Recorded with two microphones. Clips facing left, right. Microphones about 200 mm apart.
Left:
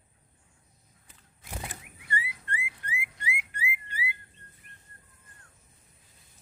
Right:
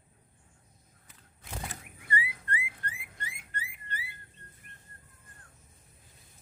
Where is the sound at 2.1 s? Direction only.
25° left (ahead or behind).